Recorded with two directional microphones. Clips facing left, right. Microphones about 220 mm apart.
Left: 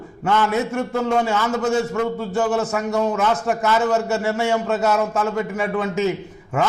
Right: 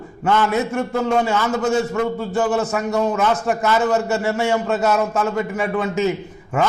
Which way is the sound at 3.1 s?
25° right (ahead or behind).